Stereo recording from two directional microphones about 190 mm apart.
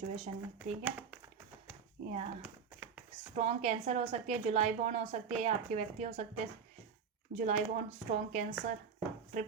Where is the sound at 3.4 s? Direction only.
35° right (ahead or behind).